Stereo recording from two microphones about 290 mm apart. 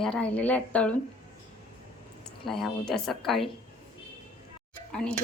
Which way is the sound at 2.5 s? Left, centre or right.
Centre.